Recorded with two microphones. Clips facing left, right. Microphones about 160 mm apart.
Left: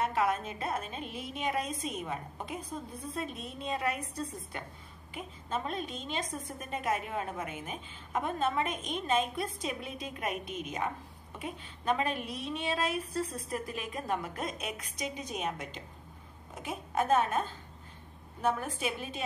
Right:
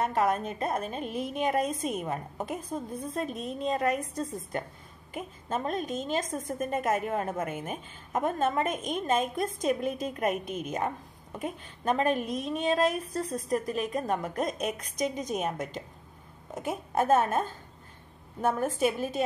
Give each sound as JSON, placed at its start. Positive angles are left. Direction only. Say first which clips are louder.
{"t": 0.0, "sound": "a woman's voice", "louder": "right 3 dB", "side_deg": -40}